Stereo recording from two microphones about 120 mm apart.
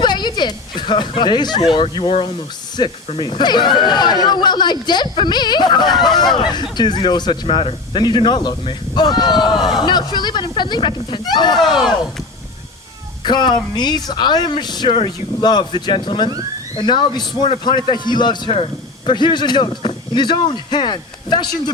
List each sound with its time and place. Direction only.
0.0 s speech: 40° left (ahead or behind)
2.8 s a man's voice: 40° left (ahead or behind)
7.4 s a man's voice: 50° left (ahead or behind)
9.6 s speech: centre (ahead or behind)
9.8 s a man's voice: 40° left (ahead or behind)
11.5 s speech: centre (ahead or behind)
13.2 s a man's voice: 40° left (ahead or behind)